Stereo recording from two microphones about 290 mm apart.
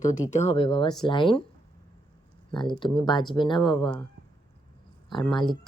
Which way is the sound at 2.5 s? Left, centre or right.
Centre.